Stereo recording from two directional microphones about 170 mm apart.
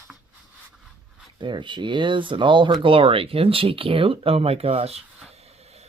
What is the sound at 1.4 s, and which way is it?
Speech, 30° right (ahead or behind).